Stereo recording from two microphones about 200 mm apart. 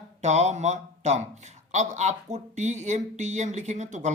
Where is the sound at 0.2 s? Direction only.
35° right (ahead or behind).